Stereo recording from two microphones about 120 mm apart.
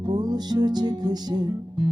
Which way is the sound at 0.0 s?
35° right (ahead or behind).